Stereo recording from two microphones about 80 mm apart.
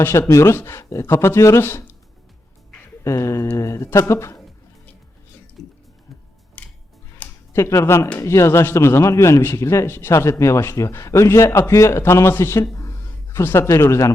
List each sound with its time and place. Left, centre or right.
0.0 s speech: left
3.0 s a sound: left
4.1 s speech: left
6.6 s music: centre
7.5 s speech: left
12.7 s a sound: left
13.4 s speech: left